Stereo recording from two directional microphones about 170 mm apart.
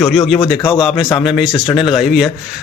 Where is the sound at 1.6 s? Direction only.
30° left (ahead or behind).